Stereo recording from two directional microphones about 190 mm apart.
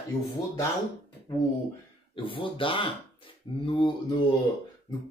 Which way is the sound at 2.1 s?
25° left (ahead or behind).